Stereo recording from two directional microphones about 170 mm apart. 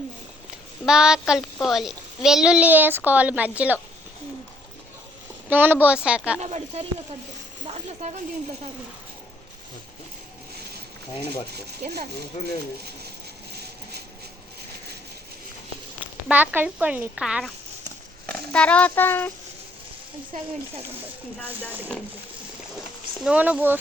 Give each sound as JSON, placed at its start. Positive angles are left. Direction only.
{"t": 0.9, "sound": "a woman's voice", "side_deg": -5}
{"t": 5.5, "sound": "speech", "side_deg": -10}
{"t": 6.4, "sound": "speech", "side_deg": -40}
{"t": 11.8, "sound": "speech", "side_deg": -70}
{"t": 16.0, "sound": "speech", "side_deg": -10}
{"t": 18.3, "sound": "speech", "side_deg": 5}
{"t": 23.2, "sound": "speech", "side_deg": -5}